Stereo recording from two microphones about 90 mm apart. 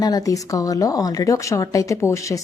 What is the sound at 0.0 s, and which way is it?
A woman's voice, 45° left (ahead or behind).